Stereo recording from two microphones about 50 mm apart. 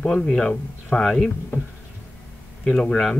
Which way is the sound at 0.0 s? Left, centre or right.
Centre.